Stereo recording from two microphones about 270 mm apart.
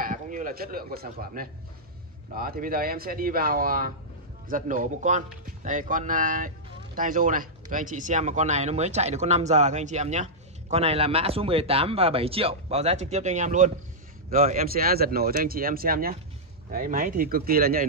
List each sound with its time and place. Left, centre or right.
0.0 s speech: right